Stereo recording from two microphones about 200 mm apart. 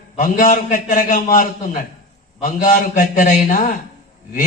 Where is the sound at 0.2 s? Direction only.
45° left (ahead or behind).